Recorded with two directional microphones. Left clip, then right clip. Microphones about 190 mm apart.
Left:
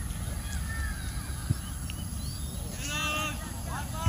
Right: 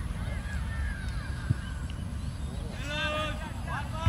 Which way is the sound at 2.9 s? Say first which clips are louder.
Even; 55° right (ahead or behind).